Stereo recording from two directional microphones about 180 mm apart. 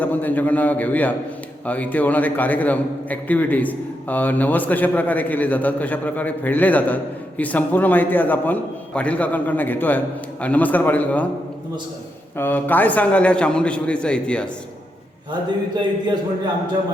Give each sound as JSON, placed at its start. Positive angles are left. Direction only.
{"t": 0.0, "sound": "a man's voice", "side_deg": 10}
{"t": 12.4, "sound": "a man's voice", "side_deg": 10}
{"t": 15.3, "sound": "a man's voice", "side_deg": -25}